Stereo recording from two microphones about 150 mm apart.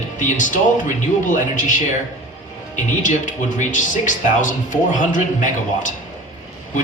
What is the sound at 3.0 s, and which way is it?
Speech, 55° left (ahead or behind).